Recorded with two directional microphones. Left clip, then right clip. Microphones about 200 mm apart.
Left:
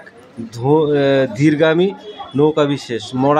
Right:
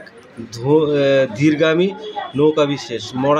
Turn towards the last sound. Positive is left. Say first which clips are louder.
# left 2 dB
turn(degrees=20)  # may be behind; listen again after turning